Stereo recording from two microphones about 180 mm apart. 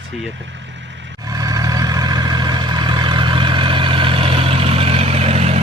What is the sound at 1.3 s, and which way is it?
Vehicle, 20° right (ahead or behind).